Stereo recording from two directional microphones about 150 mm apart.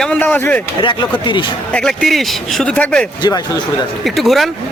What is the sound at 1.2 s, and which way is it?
Speech, 35° left (ahead or behind).